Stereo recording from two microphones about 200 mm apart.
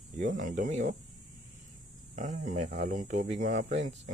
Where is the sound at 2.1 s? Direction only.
40° right (ahead or behind).